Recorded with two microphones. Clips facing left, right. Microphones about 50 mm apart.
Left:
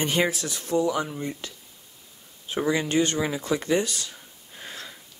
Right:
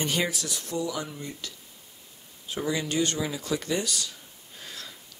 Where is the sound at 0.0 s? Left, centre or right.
Left.